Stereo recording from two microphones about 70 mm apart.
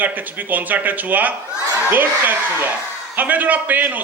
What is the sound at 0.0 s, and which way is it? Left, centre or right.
Speech, right.